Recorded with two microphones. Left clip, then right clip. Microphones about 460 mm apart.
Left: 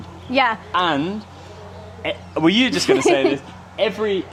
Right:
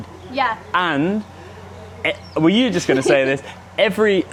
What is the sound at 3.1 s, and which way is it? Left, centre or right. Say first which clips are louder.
Speech: right 2 dB; right.